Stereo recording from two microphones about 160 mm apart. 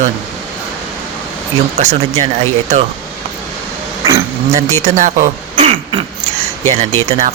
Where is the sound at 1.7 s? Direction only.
45° right (ahead or behind).